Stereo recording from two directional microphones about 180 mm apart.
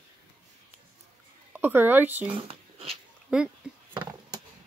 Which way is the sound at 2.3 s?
30° right (ahead or behind).